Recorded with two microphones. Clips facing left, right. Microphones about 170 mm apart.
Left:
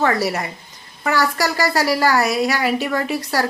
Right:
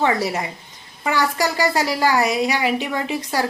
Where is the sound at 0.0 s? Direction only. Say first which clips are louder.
Left 1 dB; 15° right (ahead or behind).